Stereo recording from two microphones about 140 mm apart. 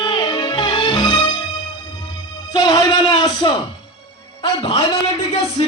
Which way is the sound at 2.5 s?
30° left (ahead or behind).